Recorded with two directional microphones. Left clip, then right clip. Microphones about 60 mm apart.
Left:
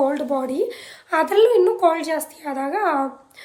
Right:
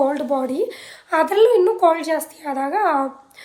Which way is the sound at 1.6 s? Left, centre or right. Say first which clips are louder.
Right 1 dB; centre.